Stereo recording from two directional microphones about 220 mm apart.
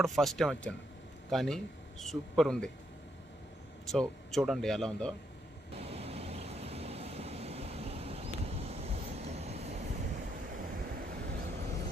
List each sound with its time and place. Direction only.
0.0 s a man's voice: centre (ahead or behind)
3.9 s speech: centre (ahead or behind)
5.7 s vehicle: 25° right (ahead or behind); by 11.6 s 45° right (ahead or behind)